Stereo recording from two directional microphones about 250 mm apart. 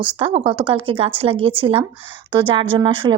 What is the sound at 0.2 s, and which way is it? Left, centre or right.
A woman's voice, right.